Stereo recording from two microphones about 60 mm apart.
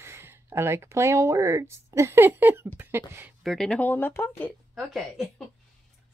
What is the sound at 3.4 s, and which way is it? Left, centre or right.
Speech, centre.